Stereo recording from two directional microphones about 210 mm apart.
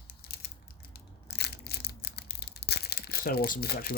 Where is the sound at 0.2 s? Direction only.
50° left (ahead or behind).